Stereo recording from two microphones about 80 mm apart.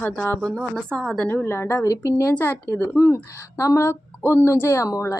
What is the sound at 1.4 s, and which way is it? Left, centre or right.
Speech, left.